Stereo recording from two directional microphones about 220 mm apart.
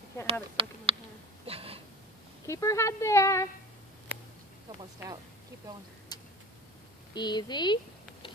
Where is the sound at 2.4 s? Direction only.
15° left (ahead or behind).